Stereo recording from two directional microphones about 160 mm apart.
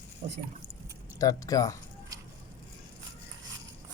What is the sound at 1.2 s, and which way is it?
Speech, 20° left (ahead or behind).